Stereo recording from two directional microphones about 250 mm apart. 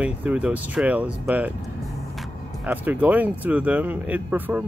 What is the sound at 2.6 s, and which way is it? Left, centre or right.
Speech, centre.